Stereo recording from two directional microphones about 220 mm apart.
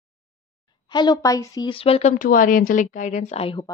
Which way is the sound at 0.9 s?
20° left (ahead or behind).